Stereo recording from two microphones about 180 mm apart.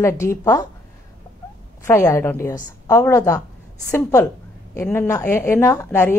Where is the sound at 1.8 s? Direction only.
15° left (ahead or behind).